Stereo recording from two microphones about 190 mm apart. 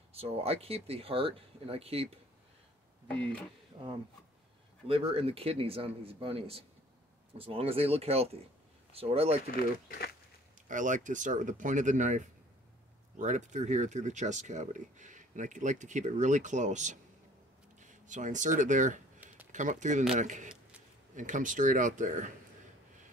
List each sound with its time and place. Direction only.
0.1 s speech: 30° right (ahead or behind)
3.8 s speech: 25° right (ahead or behind)
9.8 s speech: 55° left (ahead or behind)
10.7 s speech: 40° right (ahead or behind)
13.2 s speech: 40° right (ahead or behind)
19.1 s a sound: 10° right (ahead or behind)
19.5 s speech: 40° right (ahead or behind)